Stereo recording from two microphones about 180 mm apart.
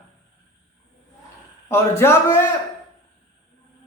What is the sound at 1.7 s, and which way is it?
Speech, 15° left (ahead or behind).